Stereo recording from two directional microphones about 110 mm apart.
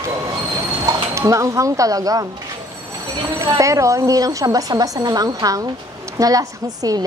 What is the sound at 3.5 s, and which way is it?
A woman's voice, 30° right (ahead or behind).